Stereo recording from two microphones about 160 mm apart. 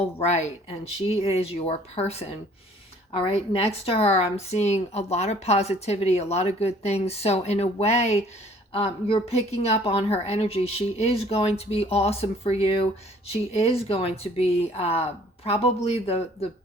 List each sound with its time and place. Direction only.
0.2 s a woman's voice: 45° left (ahead or behind)